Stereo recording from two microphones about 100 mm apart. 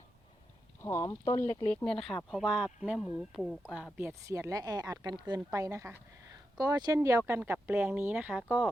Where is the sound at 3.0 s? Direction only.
Centre (ahead or behind).